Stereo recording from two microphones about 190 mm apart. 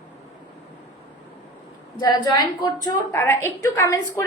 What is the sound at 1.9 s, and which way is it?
A woman's voice, 20° left (ahead or behind).